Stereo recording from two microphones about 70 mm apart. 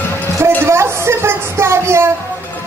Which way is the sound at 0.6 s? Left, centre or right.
Right.